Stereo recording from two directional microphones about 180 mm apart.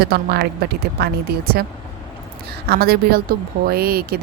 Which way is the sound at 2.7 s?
60° right (ahead or behind).